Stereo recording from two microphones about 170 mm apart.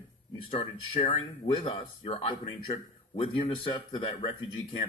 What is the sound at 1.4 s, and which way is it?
Speech, 30° left (ahead or behind).